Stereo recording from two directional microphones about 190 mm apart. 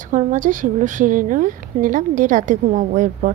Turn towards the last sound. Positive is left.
turn(degrees=-40)  # may be behind; listen again after turning